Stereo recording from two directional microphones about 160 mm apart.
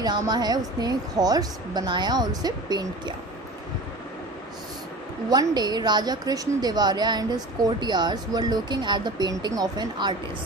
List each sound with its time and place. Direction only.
0.0 s a woman's voice: 25° right (ahead or behind)
5.3 s a woman's voice: 25° right (ahead or behind)